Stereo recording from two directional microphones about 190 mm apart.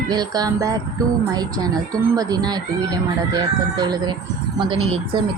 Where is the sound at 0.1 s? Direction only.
20° right (ahead or behind).